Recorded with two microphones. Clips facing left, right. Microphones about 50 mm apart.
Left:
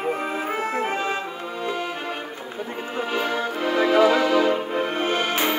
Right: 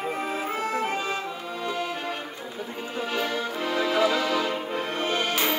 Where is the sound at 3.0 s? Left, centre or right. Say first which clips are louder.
Left 3 dB; left.